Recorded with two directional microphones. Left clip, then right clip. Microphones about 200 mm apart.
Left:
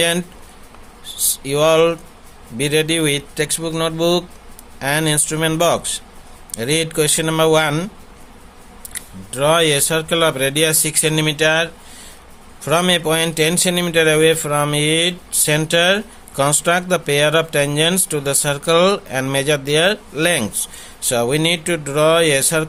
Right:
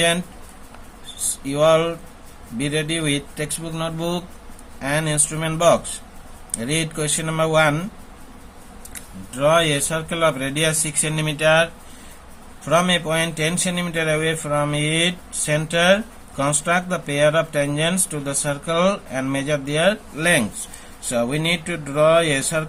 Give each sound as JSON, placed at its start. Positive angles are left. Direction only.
{"t": 1.5, "sound": "speech", "side_deg": 45}
{"t": 9.3, "sound": "speech", "side_deg": 45}